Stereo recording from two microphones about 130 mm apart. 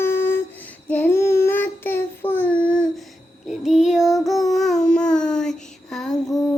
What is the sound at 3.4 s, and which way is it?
Child singing, 5° right (ahead or behind).